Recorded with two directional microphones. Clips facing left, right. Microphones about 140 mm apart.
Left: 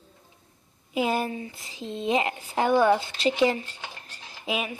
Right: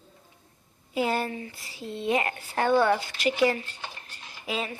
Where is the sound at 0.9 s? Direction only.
15° left (ahead or behind).